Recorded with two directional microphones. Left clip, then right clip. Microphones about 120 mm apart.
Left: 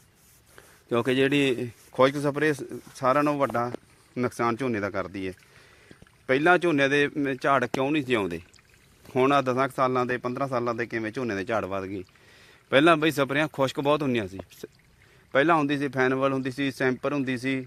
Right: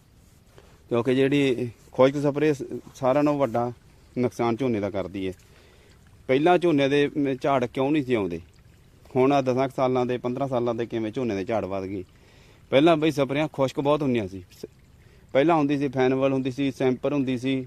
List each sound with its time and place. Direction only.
0.5 s a man's voice: 5° right (ahead or behind); by 5.0 s 30° right (ahead or behind)
6.2 s speech: 25° right (ahead or behind)
15.3 s speech: 25° right (ahead or behind)